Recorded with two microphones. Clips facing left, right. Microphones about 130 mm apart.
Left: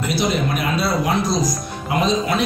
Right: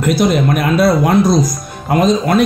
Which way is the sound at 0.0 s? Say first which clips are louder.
Right 7 dB; 50° right (ahead or behind).